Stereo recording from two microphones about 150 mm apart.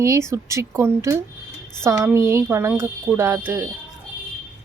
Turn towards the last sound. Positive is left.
turn(degrees=-15)  # may be behind; listen again after turning